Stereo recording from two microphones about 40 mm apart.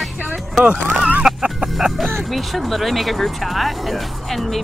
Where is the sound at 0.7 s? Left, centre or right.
Right.